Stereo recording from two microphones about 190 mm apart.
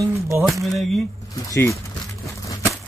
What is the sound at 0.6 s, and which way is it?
Speech, centre (ahead or behind).